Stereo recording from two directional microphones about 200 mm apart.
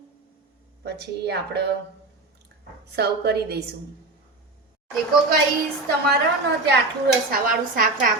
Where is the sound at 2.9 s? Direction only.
55° right (ahead or behind).